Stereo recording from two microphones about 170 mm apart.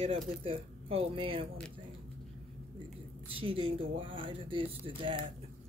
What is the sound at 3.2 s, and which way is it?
Speech, 35° right (ahead or behind).